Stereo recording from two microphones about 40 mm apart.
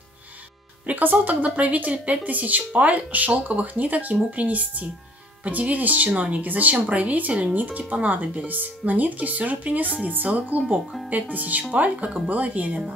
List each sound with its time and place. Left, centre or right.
0.9 s speech: right
6.0 s speech: right
6.4 s speech: right